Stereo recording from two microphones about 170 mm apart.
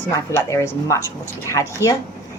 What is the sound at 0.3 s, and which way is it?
Speech, 15° left (ahead or behind).